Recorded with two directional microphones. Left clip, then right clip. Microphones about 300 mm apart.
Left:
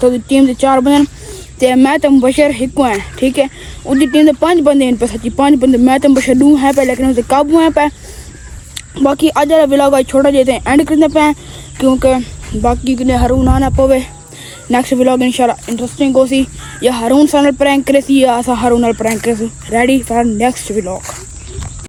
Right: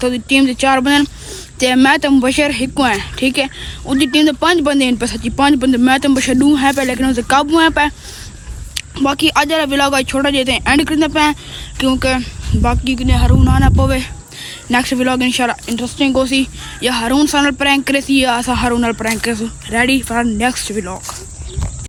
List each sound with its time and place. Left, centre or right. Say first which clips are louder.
0.1 s speech: left 2 dB; centre